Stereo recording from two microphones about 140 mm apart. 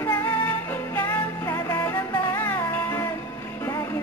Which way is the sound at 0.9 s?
15° left (ahead or behind).